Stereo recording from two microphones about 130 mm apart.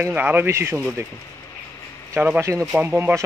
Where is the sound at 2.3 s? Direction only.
25° right (ahead or behind).